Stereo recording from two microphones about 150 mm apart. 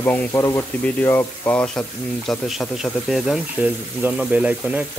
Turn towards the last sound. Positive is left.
turn(degrees=-10)  # may be behind; listen again after turning